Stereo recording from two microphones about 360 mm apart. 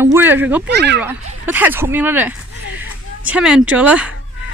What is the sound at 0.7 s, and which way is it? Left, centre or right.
Speech, right.